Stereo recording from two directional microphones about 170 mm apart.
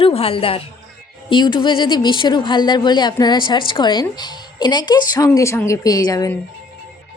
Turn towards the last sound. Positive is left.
turn(degrees=20)  # may be behind; listen again after turning